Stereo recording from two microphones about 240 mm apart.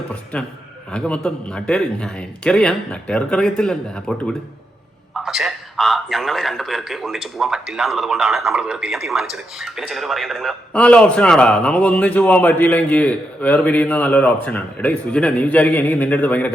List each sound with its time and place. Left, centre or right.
0.3 s a man's voice: centre